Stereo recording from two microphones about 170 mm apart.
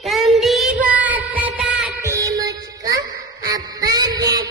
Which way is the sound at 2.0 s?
20° right (ahead or behind).